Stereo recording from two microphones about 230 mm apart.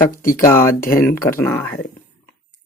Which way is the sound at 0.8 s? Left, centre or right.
Left.